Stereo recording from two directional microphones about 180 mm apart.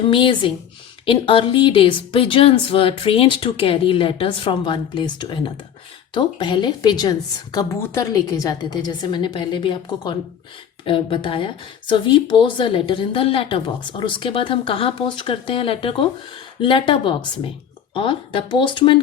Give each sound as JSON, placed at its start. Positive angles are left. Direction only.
{"t": 0.1, "sound": "speech", "side_deg": 30}